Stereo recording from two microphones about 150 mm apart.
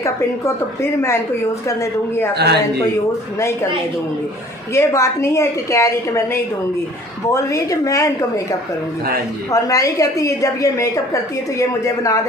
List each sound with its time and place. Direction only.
1.8 s speech: 20° left (ahead or behind)
2.3 s a man's voice: 90° right
4.7 s a woman's voice: 20° left (ahead or behind)
7.4 s a woman's voice: 20° left (ahead or behind)